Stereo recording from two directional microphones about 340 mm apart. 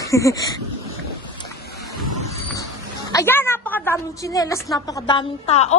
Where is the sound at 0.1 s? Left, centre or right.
Centre.